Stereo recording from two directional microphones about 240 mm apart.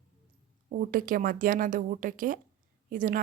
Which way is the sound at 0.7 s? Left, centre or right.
Right.